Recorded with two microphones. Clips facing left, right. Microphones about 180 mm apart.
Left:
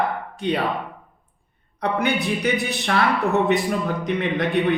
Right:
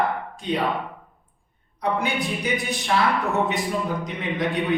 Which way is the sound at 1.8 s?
65° left (ahead or behind).